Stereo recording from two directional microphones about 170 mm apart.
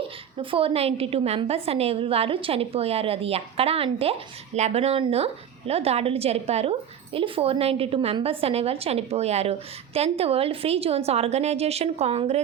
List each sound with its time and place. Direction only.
0.3 s a woman's voice: 30° right (ahead or behind)